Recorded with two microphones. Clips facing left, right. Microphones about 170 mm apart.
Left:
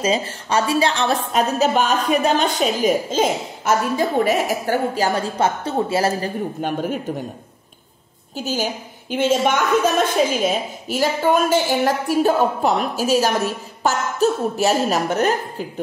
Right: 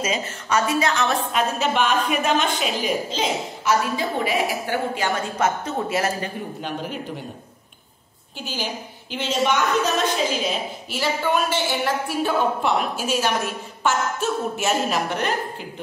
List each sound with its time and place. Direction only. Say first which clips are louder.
0.0 s a woman's voice: left 5 dB; 30° left (ahead or behind)
6.6 s a woman's voice: left 7 dB; 50° left (ahead or behind)
8.4 s a woman's voice: left 6 dB; 40° left (ahead or behind)